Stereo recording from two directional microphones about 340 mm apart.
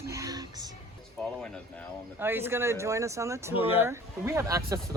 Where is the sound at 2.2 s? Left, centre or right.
Centre.